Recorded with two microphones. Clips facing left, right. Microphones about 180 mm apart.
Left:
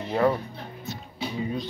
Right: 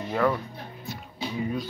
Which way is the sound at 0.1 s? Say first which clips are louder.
Left 2 dB; 30° left (ahead or behind).